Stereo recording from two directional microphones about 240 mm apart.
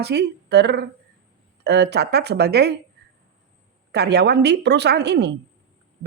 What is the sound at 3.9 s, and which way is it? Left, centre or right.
Speech, right.